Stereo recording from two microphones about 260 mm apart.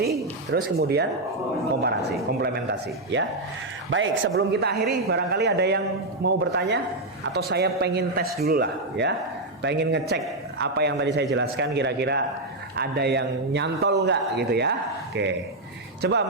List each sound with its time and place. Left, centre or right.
0.0 s speech: right
3.8 s a man's voice: right